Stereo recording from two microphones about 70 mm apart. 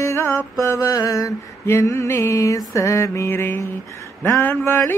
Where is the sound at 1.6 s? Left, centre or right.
Left.